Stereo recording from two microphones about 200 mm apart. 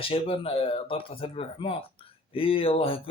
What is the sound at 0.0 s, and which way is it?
Speech, 30° left (ahead or behind).